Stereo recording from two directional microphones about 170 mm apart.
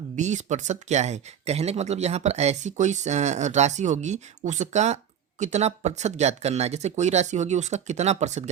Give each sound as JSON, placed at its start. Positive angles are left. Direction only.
{"t": 0.2, "sound": "speech", "side_deg": -45}